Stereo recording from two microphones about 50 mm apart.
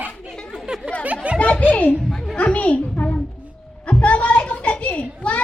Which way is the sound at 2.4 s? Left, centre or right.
Left.